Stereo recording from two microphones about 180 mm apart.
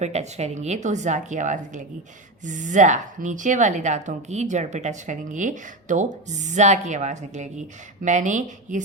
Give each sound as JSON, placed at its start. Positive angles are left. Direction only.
{"t": 0.0, "sound": "a woman's voice", "side_deg": -40}